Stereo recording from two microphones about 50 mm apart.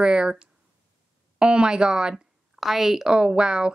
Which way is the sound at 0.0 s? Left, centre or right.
Centre.